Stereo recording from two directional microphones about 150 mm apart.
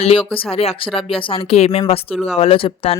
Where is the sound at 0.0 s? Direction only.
40° left (ahead or behind).